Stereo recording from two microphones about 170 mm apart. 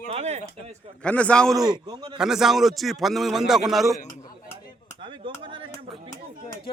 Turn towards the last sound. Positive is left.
turn(degrees=-30)  # may be behind; listen again after turning